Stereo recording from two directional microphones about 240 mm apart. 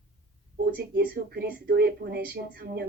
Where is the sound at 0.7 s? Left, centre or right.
Right.